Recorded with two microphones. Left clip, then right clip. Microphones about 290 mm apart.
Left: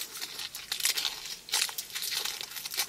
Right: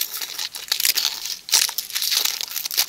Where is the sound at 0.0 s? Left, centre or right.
Centre.